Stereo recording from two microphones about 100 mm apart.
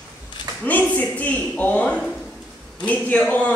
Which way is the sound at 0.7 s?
15° left (ahead or behind).